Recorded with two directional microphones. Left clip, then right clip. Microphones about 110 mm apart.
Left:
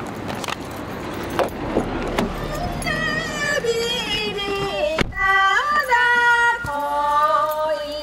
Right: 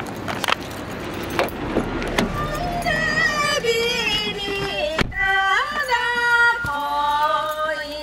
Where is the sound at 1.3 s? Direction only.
20° right (ahead or behind).